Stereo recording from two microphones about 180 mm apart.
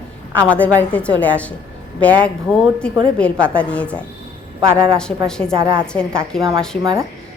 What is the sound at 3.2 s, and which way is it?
Speech, 5° left (ahead or behind).